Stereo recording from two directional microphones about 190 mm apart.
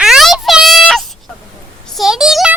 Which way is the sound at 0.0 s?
Centre (ahead or behind).